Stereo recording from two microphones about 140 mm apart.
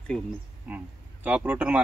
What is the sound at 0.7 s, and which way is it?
Speech, 10° right (ahead or behind).